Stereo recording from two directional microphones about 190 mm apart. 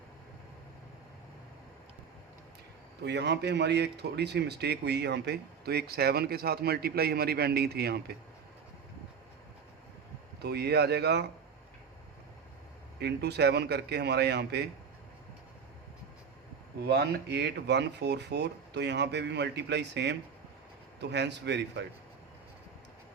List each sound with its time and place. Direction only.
3.0 s a man's voice: 65° right (ahead or behind)
10.4 s a man's voice: 60° right (ahead or behind)
13.0 s a man's voice: 60° right (ahead or behind)
16.8 s a man's voice: 55° right (ahead or behind)